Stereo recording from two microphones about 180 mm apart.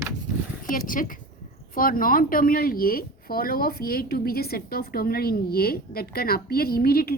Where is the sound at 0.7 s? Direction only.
50° left (ahead or behind).